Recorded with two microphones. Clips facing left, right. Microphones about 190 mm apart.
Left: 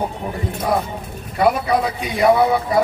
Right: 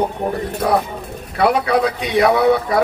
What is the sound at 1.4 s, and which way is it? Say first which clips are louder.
A man's voice: right 1 dB; 70° right (ahead or behind).